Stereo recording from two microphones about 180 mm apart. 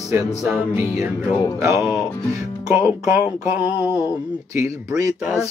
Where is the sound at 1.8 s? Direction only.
5° right (ahead or behind).